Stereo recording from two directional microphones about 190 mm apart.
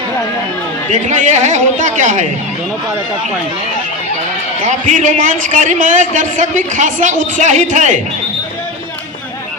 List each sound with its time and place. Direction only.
0.9 s a man's voice: 40° right (ahead or behind)
4.6 s a man's voice: 40° right (ahead or behind)